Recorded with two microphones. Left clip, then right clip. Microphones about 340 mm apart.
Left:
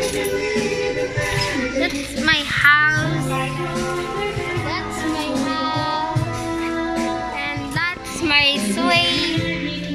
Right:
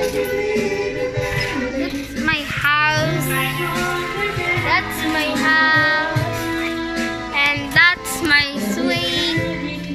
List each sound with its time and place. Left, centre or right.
2.2 s music: centre
5.5 s music: right
7.3 s music: centre